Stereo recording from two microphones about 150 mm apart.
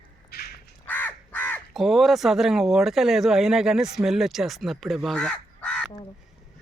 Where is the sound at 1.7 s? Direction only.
Centre (ahead or behind).